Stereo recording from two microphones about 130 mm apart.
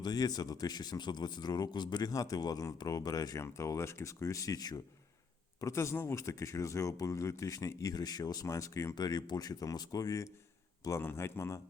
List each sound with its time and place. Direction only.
0.0 s speech: 30° left (ahead or behind)